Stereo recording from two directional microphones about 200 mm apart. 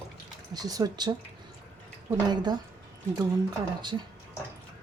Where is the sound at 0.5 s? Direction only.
20° right (ahead or behind).